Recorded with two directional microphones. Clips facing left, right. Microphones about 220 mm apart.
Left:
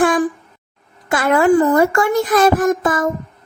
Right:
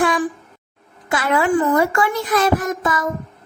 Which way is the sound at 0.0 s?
50° left (ahead or behind).